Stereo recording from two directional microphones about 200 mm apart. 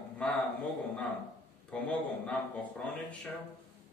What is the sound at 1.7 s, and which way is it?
Speech, 5° left (ahead or behind).